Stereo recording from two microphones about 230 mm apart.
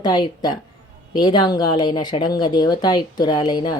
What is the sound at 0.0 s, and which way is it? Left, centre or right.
Speech, centre.